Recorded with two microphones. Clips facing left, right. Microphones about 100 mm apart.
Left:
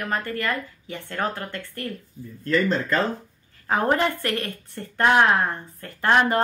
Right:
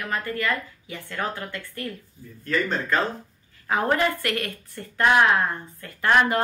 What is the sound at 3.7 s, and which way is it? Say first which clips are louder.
Speech: left 1 dB; 35° left (ahead or behind).